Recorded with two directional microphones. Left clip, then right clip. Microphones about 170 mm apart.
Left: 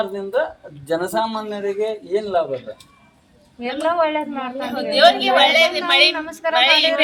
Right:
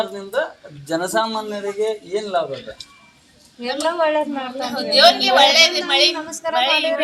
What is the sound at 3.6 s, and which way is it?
Speech, 45° right (ahead or behind).